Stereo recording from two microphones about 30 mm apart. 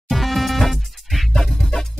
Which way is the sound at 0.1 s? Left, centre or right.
Centre.